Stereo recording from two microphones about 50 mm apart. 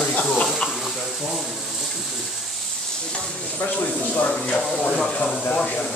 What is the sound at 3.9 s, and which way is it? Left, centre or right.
Speech, left.